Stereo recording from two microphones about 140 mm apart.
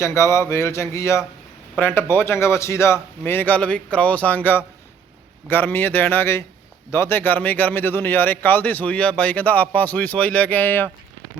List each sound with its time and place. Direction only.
0.0 s speech: 20° left (ahead or behind)